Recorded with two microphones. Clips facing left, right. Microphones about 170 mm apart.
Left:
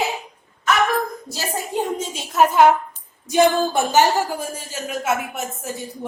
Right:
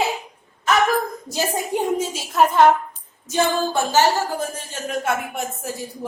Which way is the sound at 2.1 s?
Centre (ahead or behind).